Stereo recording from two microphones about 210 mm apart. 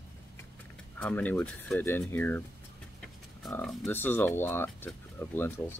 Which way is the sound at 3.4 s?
5° left (ahead or behind).